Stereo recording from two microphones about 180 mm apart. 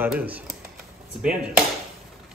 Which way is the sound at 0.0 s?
10° right (ahead or behind).